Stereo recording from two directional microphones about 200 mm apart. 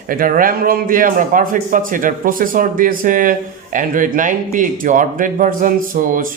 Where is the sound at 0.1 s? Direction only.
45° right (ahead or behind).